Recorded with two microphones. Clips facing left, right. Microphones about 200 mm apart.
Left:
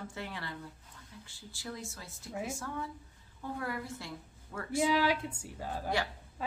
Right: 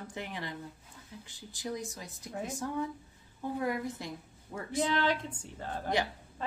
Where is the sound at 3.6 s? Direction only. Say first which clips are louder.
Right 6 dB; 20° right (ahead or behind).